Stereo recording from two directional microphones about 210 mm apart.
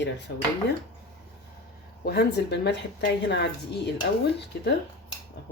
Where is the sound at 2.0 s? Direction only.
50° left (ahead or behind).